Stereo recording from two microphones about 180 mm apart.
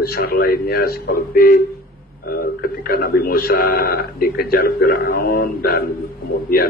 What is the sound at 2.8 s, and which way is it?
Speech, 55° left (ahead or behind).